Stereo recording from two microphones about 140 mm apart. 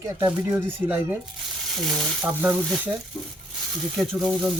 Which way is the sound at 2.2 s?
15° right (ahead or behind).